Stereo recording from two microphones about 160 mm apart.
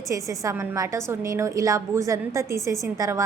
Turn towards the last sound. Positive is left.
turn(degrees=-15)  # may be behind; listen again after turning